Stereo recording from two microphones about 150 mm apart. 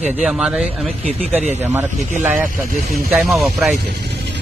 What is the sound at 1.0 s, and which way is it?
Speech, 45° right (ahead or behind).